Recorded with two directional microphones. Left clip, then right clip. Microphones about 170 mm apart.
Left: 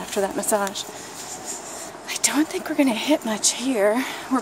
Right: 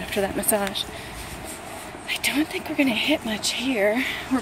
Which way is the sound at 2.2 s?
30° left (ahead or behind).